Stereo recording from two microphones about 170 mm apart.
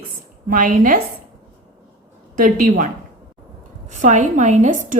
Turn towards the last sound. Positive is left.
turn(degrees=-45)  # may be behind; listen again after turning